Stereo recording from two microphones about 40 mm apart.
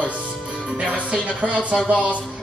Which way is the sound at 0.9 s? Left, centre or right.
Right.